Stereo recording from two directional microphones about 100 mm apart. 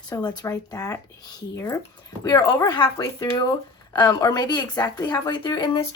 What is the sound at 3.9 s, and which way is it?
Speech, 40° left (ahead or behind).